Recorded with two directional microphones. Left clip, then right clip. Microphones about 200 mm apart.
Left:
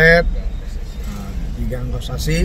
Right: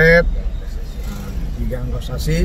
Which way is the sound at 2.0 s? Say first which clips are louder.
Left 2 dB; 15° left (ahead or behind).